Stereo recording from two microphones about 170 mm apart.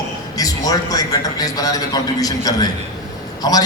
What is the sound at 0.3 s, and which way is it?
A man's voice, 20° left (ahead or behind).